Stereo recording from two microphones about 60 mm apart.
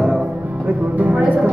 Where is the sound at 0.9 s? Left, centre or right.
Right.